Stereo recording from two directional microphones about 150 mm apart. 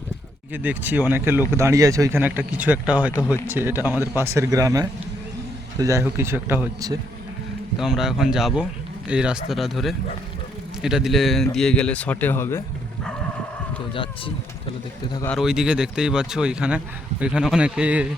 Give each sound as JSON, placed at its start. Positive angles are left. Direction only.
{"t": 0.5, "sound": "a man's voice", "side_deg": -10}
{"t": 7.8, "sound": "speech", "side_deg": -5}
{"t": 13.9, "sound": "speech", "side_deg": 35}
{"t": 15.4, "sound": "speech", "side_deg": -5}